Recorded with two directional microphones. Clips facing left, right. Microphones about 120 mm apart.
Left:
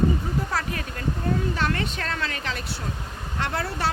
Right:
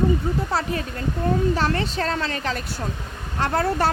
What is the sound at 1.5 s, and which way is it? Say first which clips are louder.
A woman's voice: right 4 dB; 35° right (ahead or behind).